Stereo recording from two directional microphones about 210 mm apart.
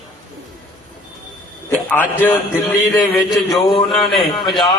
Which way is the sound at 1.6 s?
10° left (ahead or behind).